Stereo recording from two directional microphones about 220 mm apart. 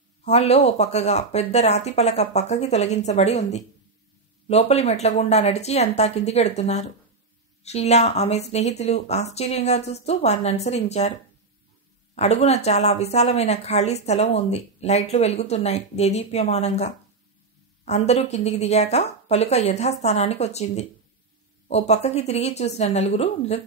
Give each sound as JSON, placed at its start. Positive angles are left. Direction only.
{"t": 0.2, "sound": "a woman's voice", "side_deg": 30}
{"t": 12.2, "sound": "a woman's voice", "side_deg": 30}